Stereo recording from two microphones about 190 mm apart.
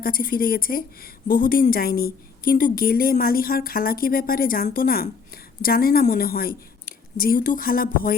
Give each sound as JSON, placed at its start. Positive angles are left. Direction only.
{"t": 0.0, "sound": "a woman's voice", "side_deg": 50}